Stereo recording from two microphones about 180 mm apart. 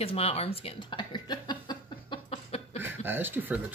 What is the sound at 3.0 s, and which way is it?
Speech, 10° right (ahead or behind).